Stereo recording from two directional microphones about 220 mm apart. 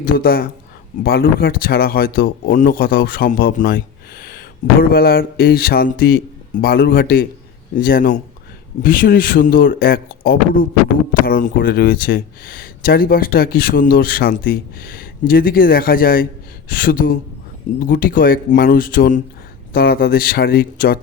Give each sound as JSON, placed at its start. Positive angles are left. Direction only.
{"t": 0.0, "sound": "speech", "side_deg": 40}